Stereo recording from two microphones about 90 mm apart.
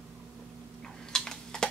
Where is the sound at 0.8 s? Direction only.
5° left (ahead or behind).